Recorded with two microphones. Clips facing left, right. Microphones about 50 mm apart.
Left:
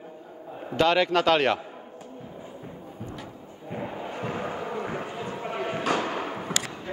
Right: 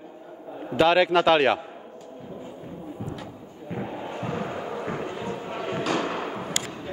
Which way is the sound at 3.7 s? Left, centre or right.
Centre.